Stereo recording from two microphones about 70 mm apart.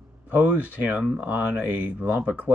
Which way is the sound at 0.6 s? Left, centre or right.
Right.